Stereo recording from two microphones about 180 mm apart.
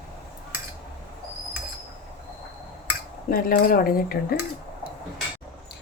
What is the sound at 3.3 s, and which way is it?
Speech, 55° left (ahead or behind).